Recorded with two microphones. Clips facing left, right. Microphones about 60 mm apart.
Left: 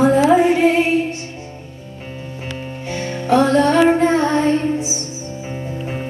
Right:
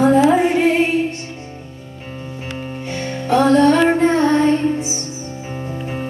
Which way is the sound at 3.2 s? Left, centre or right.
Centre.